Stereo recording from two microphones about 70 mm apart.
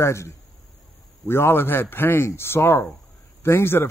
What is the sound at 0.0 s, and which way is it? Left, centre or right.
Speech, left.